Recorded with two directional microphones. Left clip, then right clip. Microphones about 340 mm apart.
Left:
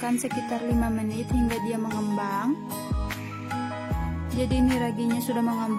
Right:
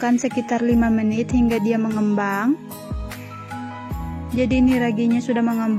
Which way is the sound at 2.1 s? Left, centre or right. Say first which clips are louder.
Right 5 dB; left.